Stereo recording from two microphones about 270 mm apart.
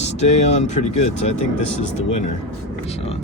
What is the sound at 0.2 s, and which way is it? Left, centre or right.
Speech, left.